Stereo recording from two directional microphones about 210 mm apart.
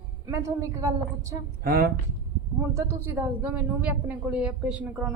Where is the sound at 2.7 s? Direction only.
15° right (ahead or behind).